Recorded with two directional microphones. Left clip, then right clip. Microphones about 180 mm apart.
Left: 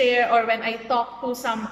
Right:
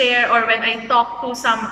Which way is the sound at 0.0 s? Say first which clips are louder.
Right 3 dB; 25° left (ahead or behind).